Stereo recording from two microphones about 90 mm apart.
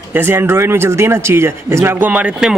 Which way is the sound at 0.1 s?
25° right (ahead or behind).